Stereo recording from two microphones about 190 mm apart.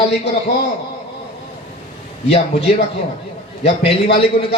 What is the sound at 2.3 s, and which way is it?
A man's voice, 35° left (ahead or behind).